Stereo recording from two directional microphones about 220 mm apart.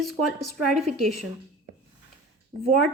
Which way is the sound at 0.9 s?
30° right (ahead or behind).